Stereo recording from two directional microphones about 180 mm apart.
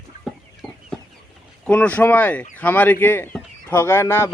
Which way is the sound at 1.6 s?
5° left (ahead or behind).